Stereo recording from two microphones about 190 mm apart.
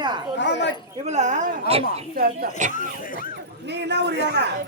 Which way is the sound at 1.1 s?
40° right (ahead or behind).